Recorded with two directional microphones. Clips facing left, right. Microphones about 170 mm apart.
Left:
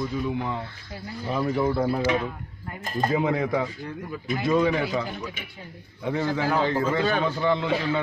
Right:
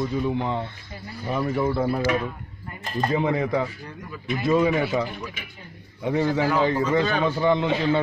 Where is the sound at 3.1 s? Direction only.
Centre (ahead or behind).